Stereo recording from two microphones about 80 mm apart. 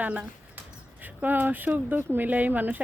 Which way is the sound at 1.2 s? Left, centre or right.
Right.